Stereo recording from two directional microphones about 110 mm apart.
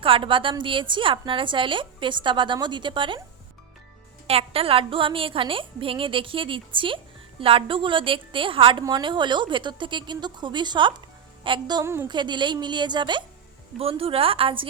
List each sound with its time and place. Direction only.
0.0 s a woman's voice: 55° right (ahead or behind)
4.3 s a woman's voice: 60° right (ahead or behind)
11.8 s a woman's voice: 20° right (ahead or behind)
12.0 s a woman's voice: 45° right (ahead or behind)
13.7 s a woman's voice: 60° right (ahead or behind)